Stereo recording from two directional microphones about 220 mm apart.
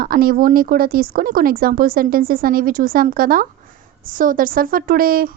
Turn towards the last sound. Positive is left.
turn(degrees=-40)  # may be behind; listen again after turning